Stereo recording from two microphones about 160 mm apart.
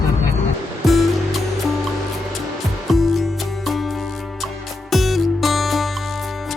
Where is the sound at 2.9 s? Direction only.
Centre (ahead or behind).